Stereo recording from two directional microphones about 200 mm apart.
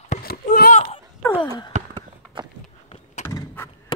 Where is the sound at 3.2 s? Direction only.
10° left (ahead or behind).